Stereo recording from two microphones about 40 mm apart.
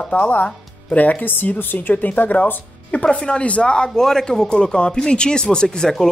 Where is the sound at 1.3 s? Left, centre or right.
Left.